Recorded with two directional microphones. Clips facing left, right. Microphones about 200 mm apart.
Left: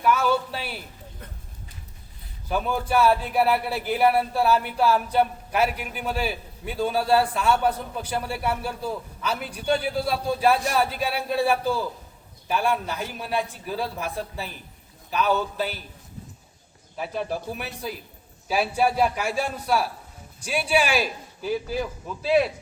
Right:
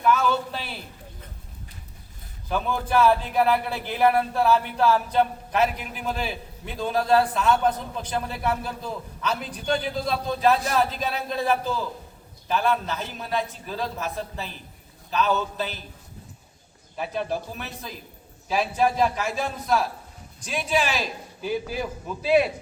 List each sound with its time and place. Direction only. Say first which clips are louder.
0.0 s a sound: even; 10° left (ahead or behind)
2.5 s a man's voice: left 1 dB; 10° left (ahead or behind)
17.0 s a man's voice: right 1 dB; 5° left (ahead or behind)
22.2 s speech: right 1 dB; 15° right (ahead or behind)